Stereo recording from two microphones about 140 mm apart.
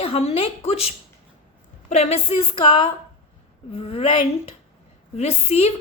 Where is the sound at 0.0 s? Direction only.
45° left (ahead or behind).